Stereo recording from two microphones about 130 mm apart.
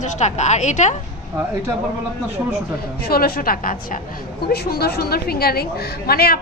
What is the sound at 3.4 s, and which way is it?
Speech, 90° left.